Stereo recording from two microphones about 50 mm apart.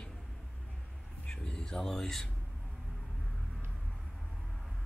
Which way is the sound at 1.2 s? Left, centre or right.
Centre.